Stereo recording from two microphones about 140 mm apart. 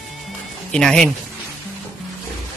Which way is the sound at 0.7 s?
5° left (ahead or behind).